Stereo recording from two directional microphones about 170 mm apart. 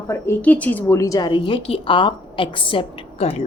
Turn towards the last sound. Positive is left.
turn(degrees=35)  # may be behind; listen again after turning